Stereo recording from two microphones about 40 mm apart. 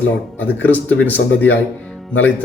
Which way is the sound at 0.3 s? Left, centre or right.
Left.